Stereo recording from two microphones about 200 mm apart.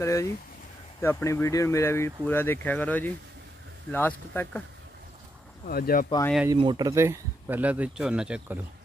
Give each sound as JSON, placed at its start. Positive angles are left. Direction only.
{"t": 0.0, "sound": "speech", "side_deg": 15}
{"t": 5.7, "sound": "speech", "side_deg": 50}
{"t": 6.5, "sound": "speech", "side_deg": -20}